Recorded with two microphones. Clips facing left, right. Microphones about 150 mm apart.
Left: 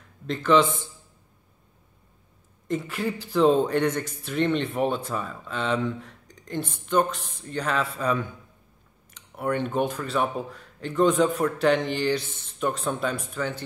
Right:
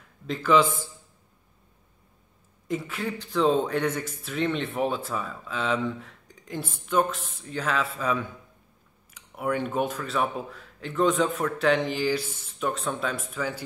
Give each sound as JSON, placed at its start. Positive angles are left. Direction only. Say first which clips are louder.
{"t": 0.3, "sound": "a man's voice", "louder": "left 1 dB", "side_deg": -5}
{"t": 2.7, "sound": "a man's voice", "louder": "left 2 dB", "side_deg": 0}